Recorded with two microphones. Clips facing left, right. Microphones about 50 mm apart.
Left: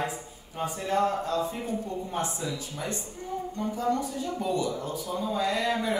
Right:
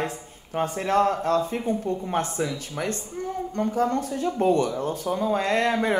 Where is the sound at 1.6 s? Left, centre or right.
Right.